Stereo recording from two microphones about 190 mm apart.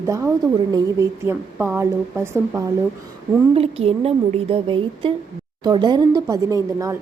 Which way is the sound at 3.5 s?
30° right (ahead or behind).